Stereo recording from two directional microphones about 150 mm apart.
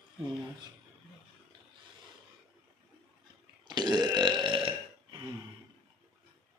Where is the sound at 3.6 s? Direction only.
30° right (ahead or behind).